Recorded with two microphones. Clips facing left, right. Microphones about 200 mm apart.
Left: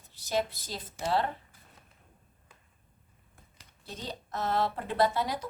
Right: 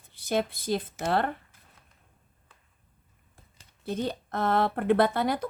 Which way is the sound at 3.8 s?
55° right (ahead or behind).